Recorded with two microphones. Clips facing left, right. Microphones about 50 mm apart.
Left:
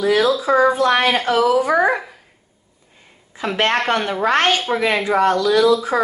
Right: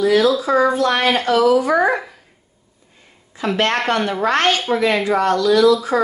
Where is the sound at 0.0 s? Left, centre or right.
Centre.